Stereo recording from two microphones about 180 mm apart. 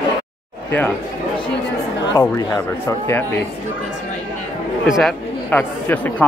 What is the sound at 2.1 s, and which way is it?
Speech, 15° left (ahead or behind).